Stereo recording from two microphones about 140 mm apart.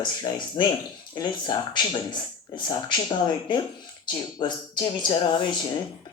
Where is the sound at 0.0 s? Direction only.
35° left (ahead or behind).